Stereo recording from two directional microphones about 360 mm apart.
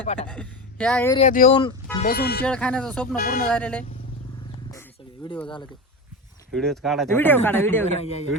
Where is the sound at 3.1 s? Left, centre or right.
Left.